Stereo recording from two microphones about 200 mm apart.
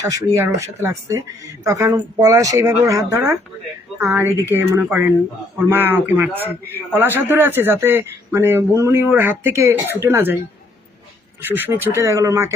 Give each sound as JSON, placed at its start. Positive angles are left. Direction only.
{"t": 0.0, "sound": "a man's voice", "side_deg": -15}
{"t": 11.4, "sound": "a man's voice", "side_deg": -10}